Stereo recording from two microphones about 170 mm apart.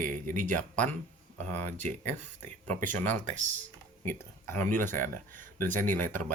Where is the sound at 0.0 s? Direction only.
50° right (ahead or behind).